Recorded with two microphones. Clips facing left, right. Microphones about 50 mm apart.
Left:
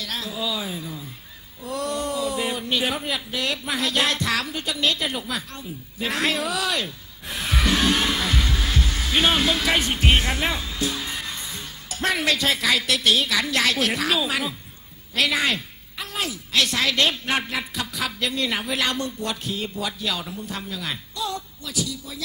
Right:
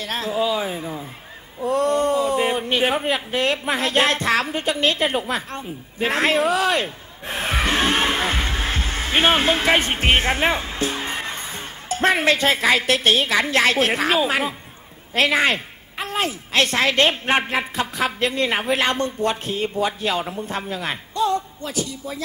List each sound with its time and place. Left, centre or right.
0.0 s a woman's voice: right